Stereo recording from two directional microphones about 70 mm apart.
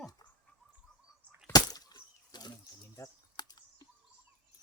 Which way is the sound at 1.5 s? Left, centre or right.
Left.